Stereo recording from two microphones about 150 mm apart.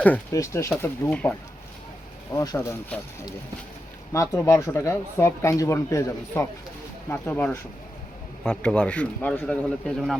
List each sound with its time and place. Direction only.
0.3 s speech: 20° left (ahead or behind)
2.3 s speech: 20° left (ahead or behind)
4.1 s speech: 20° left (ahead or behind); by 10.2 s 5° left (ahead or behind)